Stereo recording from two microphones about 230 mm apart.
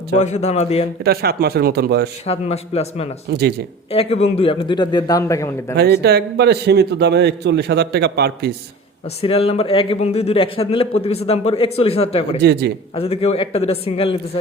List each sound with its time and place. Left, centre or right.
0.2 s a man's voice: left
1.0 s a man's voice: right
2.2 s a man's voice: left
3.2 s a man's voice: right
3.9 s a man's voice: left
5.7 s a man's voice: right
9.2 s a man's voice: left
12.4 s a man's voice: right
13.0 s a man's voice: left